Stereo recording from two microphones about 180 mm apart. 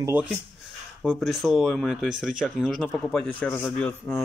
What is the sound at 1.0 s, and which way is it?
Speech, centre (ahead or behind).